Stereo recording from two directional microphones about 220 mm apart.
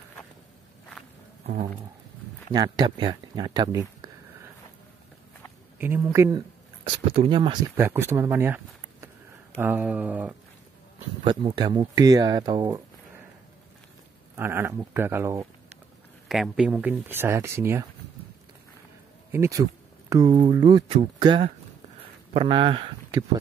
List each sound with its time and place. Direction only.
1.4 s a sound: 40° right (ahead or behind)
2.5 s speech: 20° right (ahead or behind)
5.8 s speech: 10° right (ahead or behind)
9.6 s speech: 10° right (ahead or behind)
11.2 s speech: 20° right (ahead or behind)
14.3 s speech: 10° right (ahead or behind)
19.3 s speech: 15° right (ahead or behind)